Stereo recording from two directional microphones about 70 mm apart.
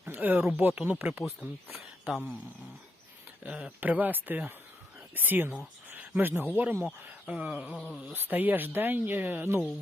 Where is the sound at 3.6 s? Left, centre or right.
Right.